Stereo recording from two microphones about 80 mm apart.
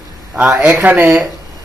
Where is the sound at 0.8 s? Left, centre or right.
Right.